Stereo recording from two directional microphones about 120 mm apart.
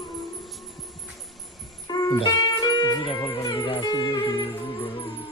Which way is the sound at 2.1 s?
40° left (ahead or behind).